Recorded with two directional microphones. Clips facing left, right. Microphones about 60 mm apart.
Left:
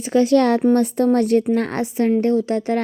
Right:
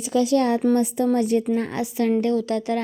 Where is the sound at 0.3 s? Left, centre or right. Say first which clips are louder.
Left 4 dB; left.